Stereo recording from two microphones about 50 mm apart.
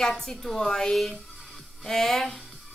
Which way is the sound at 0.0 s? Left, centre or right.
Centre.